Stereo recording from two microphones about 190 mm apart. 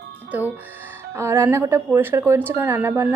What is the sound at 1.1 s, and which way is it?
Speech, 15° right (ahead or behind).